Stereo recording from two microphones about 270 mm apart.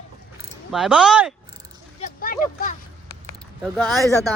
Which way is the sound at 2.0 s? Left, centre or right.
Left.